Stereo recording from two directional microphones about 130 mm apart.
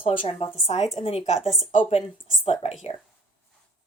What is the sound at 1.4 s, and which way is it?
Speech, centre (ahead or behind).